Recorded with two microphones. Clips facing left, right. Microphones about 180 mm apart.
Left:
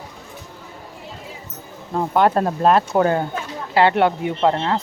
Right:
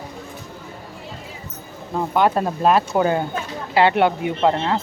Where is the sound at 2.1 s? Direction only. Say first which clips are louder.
Left 2 dB; 5° right (ahead or behind).